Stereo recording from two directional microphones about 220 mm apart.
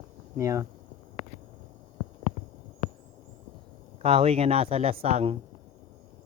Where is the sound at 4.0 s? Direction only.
25° right (ahead or behind).